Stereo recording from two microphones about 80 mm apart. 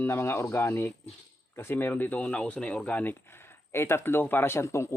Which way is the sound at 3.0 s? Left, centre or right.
Left.